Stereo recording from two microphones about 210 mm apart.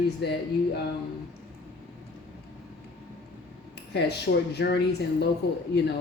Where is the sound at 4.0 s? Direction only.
50° left (ahead or behind).